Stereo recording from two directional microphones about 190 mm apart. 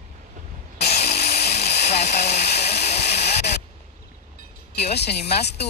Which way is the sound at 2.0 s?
35° left (ahead or behind).